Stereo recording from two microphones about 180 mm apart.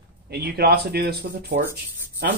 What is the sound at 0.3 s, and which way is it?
Speech, 65° right (ahead or behind).